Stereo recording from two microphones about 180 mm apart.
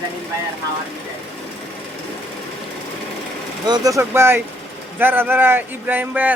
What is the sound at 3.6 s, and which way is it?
Speech, 20° right (ahead or behind).